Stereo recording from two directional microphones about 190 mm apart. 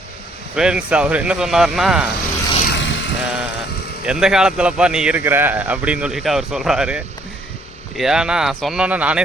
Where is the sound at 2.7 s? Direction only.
75° left (ahead or behind).